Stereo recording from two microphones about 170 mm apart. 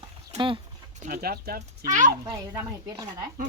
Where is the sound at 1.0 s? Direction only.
55° right (ahead or behind).